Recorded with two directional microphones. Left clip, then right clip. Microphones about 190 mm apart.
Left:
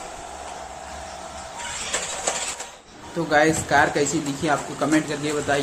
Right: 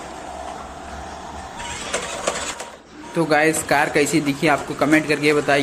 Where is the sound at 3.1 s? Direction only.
20° right (ahead or behind).